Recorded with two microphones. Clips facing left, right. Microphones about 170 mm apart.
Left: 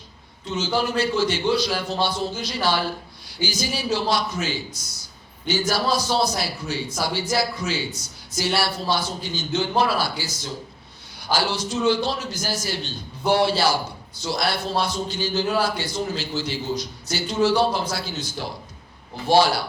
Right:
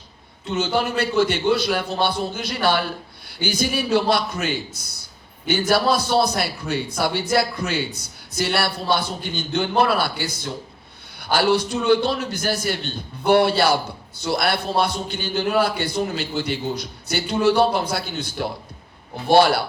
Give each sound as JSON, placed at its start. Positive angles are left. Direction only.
{"t": 0.5, "sound": "a man's voice", "side_deg": -60}